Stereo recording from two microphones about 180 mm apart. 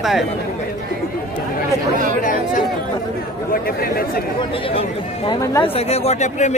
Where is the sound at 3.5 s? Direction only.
55° left (ahead or behind).